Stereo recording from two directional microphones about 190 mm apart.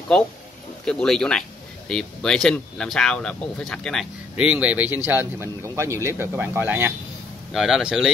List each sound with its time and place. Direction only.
0.8 s speech: 5° left (ahead or behind)